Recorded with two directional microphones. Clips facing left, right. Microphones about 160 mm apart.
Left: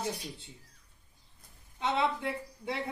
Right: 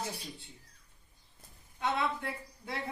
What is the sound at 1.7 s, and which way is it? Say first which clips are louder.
A woman's voice: left 2 dB; 20° left (ahead or behind).